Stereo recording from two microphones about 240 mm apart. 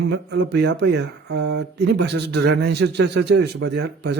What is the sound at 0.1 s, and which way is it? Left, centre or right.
Speech, right.